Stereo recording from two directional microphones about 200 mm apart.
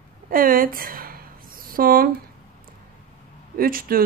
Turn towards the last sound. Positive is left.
turn(degrees=-45)  # may be behind; listen again after turning